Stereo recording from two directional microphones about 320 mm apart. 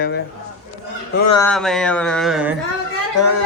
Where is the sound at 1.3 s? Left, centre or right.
Centre.